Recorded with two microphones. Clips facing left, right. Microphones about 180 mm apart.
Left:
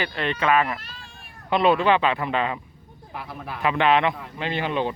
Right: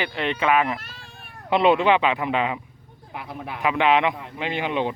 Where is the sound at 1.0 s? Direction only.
60° right (ahead or behind).